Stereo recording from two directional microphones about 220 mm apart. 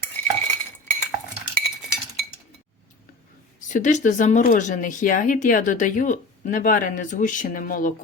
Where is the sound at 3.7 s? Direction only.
35° left (ahead or behind).